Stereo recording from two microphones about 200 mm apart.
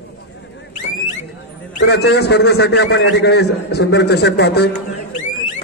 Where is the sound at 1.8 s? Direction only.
55° left (ahead or behind).